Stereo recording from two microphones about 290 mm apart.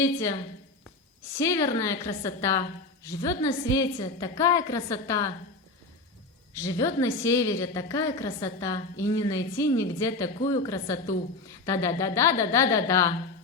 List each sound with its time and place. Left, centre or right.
0.0 s a woman's voice: centre
1.4 s a woman's voice: centre
6.6 s a woman's voice: centre